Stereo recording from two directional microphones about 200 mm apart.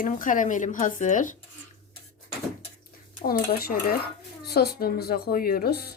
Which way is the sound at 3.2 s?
50° left (ahead or behind).